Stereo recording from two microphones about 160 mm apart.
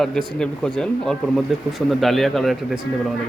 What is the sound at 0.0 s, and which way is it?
Speech, 5° left (ahead or behind).